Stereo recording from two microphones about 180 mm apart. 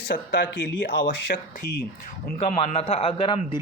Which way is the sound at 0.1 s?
90° left.